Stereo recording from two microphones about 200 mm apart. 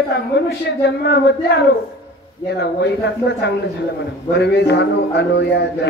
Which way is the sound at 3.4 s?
55° left (ahead or behind).